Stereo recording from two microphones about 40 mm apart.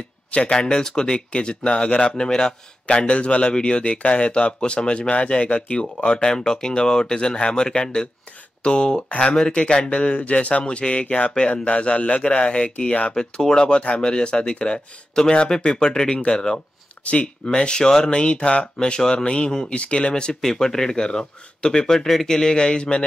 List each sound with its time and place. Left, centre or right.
0.3 s speech: left
13.1 s speech: centre
20.3 s speech: centre